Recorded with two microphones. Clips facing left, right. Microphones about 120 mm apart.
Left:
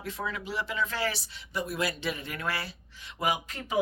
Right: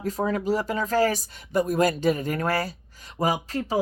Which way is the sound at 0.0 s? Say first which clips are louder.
Right 10 dB; 40° right (ahead or behind).